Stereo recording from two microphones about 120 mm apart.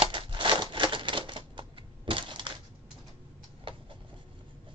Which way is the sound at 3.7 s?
45° right (ahead or behind).